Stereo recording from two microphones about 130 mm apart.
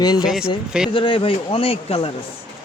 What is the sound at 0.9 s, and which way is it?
A man's voice, 40° left (ahead or behind).